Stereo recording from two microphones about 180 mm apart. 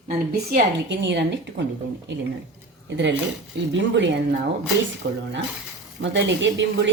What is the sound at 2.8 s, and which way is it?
Speech, 80° right.